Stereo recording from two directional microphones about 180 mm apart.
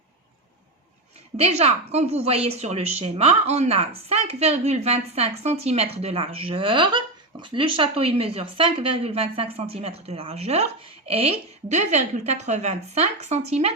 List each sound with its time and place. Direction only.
1.4 s a woman's voice: 35° right (ahead or behind)